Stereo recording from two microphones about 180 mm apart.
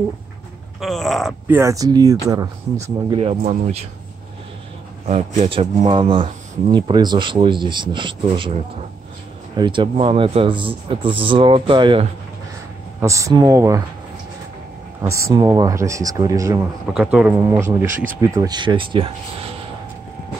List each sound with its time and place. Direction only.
0.7 s speech: centre (ahead or behind)
1.5 s speech: 15° right (ahead or behind)
3.2 s a man's voice: 35° right (ahead or behind)
5.0 s a man's voice: 35° right (ahead or behind)
9.6 s speech: 25° right (ahead or behind)
13.0 s speech: 15° right (ahead or behind)
15.0 s speech: 15° right (ahead or behind)
16.8 s speech: 5° right (ahead or behind)
17.8 s speech: 45° right (ahead or behind)
18.2 s speech: 20° right (ahead or behind)